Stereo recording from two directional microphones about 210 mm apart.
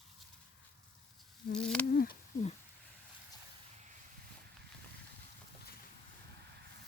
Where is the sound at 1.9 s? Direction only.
45° left (ahead or behind).